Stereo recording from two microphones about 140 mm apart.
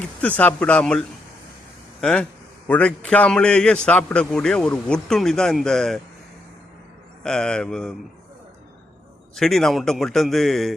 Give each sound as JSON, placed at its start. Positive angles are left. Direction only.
{"t": 0.0, "sound": "a man's voice", "side_deg": 10}
{"t": 7.2, "sound": "a man's voice", "side_deg": 5}
{"t": 9.3, "sound": "a man's voice", "side_deg": 5}